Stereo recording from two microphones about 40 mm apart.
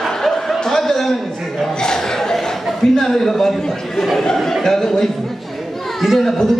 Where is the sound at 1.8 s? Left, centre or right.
Centre.